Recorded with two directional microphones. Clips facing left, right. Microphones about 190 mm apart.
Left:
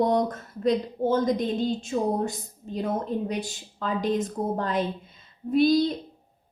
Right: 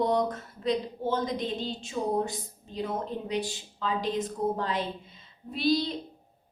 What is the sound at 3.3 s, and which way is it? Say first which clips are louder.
A woman's voice: even; 45° left (ahead or behind).